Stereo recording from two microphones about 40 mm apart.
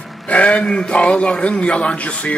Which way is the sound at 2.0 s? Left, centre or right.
Left.